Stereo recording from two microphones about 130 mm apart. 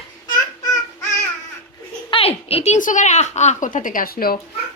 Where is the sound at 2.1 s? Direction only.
50° left (ahead or behind).